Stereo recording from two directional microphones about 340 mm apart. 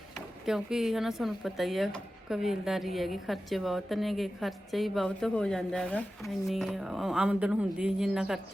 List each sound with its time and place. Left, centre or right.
0.4 s speech: centre